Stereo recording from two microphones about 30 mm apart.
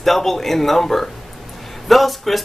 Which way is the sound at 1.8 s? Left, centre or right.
Centre.